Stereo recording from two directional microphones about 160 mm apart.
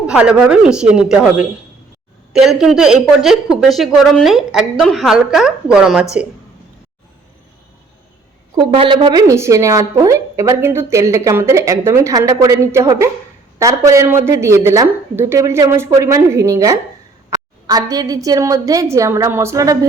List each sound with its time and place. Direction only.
0.1 s speech: 5° right (ahead or behind)
8.5 s a woman's voice: 30° right (ahead or behind)